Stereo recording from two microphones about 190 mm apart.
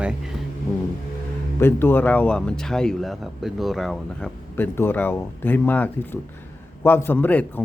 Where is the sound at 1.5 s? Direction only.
10° left (ahead or behind).